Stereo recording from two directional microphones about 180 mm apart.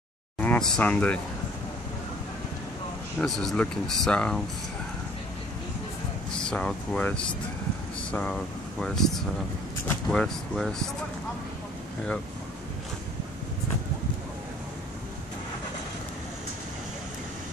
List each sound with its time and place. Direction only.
0.4 s speech: 5° left (ahead or behind)
3.2 s speech: centre (ahead or behind)
6.3 s speech: 5° left (ahead or behind)